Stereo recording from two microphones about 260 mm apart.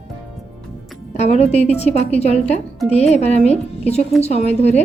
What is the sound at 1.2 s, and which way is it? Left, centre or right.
A woman's voice, left.